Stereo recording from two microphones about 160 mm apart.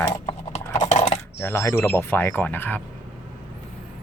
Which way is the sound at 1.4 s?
15° left (ahead or behind).